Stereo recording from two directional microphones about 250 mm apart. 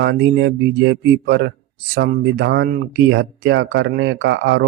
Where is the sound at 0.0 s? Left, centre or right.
Right.